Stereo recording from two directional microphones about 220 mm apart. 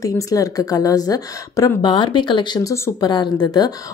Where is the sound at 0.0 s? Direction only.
15° left (ahead or behind).